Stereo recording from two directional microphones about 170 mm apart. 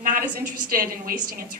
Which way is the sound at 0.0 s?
50° right (ahead or behind).